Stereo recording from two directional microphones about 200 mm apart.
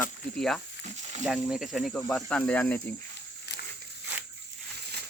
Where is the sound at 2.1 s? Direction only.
5° left (ahead or behind).